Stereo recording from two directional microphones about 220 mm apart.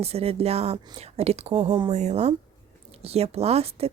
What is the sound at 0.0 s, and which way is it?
Speech, 30° right (ahead or behind).